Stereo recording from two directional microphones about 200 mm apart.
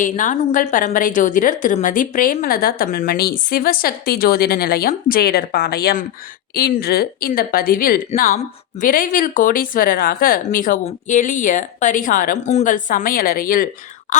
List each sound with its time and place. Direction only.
0.0 s a woman's voice: 40° left (ahead or behind)